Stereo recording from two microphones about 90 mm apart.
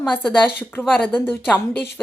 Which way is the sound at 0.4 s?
20° left (ahead or behind).